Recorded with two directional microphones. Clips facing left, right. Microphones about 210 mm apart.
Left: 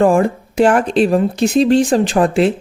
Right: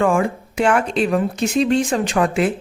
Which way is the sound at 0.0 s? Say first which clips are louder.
Left 5 dB; 35° left (ahead or behind).